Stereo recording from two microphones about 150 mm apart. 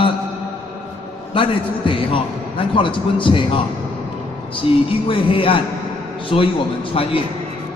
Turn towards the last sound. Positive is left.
turn(degrees=35)  # may be behind; listen again after turning